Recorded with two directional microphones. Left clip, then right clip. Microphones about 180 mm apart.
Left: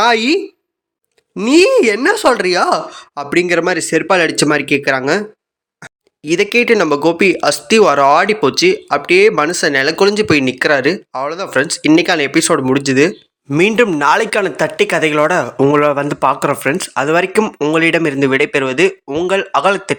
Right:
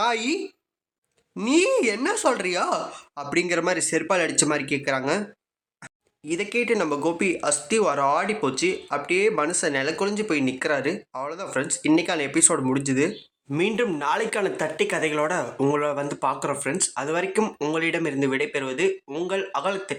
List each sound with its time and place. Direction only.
0.0 s a woman's voice: 35° left (ahead or behind)
1.4 s speech: 30° left (ahead or behind)
13.6 s speech: 45° left (ahead or behind)
17.4 s speech: 25° left (ahead or behind)
17.7 s speech: 35° left (ahead or behind)
19.3 s speech: 35° left (ahead or behind)